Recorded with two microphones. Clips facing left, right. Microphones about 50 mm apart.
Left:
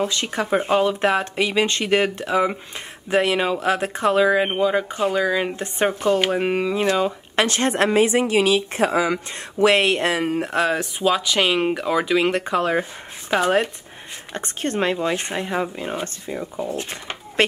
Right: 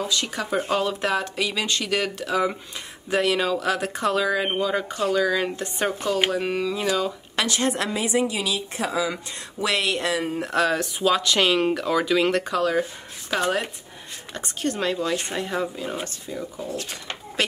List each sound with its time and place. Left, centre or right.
0.1 s speech: left
5.6 s speech: left
7.4 s speech: left
11.0 s speech: centre
12.4 s speech: left
14.3 s speech: left